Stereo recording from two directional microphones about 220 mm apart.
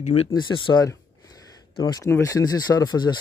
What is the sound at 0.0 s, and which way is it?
Speech, 25° left (ahead or behind).